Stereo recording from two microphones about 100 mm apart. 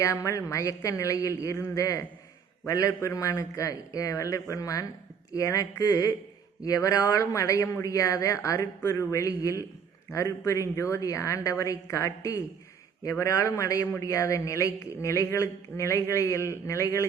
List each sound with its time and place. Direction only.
0.0 s a man's voice: 30° left (ahead or behind)